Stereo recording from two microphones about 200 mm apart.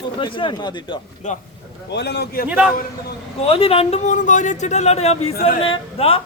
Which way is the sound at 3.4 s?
30° left (ahead or behind).